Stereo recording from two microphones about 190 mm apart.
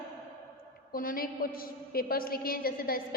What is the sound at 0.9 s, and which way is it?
A woman's voice, 50° left (ahead or behind).